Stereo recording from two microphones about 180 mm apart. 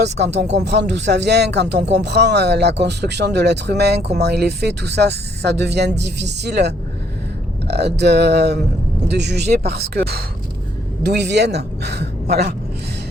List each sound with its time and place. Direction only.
0.3 s speech: 40° right (ahead or behind)
0.6 s speech: 70° right (ahead or behind)